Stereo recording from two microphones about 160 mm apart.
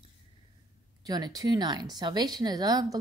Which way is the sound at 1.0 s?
25° right (ahead or behind).